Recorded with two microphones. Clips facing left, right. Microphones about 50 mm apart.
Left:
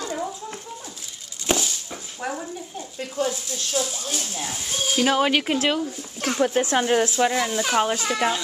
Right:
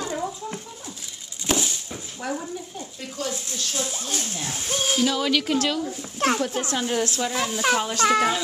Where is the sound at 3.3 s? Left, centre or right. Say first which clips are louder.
Left 3 dB; right.